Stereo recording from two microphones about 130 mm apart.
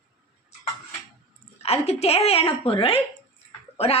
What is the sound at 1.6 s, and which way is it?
Speech, 55° left (ahead or behind).